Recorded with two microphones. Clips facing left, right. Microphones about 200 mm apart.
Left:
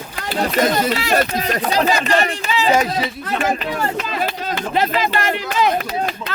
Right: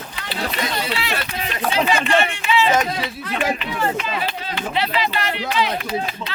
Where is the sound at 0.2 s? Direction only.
45° left (ahead or behind).